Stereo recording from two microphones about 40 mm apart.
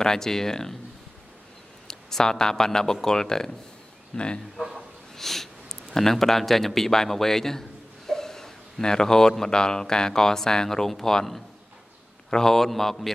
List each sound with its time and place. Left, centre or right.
0.0 s speech: centre
1.9 s speech: centre
4.7 s snort: centre
5.9 s speech: centre
8.1 s a sound: centre
9.4 s speech: centre